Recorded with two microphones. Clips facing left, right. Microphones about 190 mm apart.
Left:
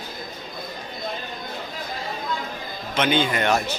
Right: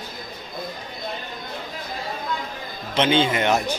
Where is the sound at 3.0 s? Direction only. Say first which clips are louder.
Right 2 dB; 25° right (ahead or behind).